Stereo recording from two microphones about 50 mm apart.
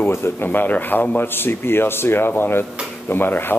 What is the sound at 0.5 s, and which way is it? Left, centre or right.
A man's voice, left.